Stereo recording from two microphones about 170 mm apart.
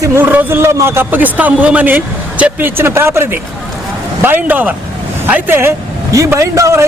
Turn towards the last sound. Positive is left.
turn(degrees=-20)  # may be behind; listen again after turning